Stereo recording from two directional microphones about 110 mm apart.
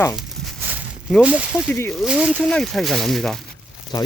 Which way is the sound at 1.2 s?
10° right (ahead or behind).